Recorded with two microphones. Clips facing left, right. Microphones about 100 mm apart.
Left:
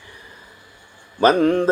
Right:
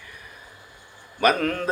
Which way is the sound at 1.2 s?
25° left (ahead or behind).